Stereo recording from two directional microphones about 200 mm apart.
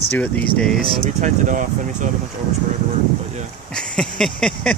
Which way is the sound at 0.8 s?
40° right (ahead or behind).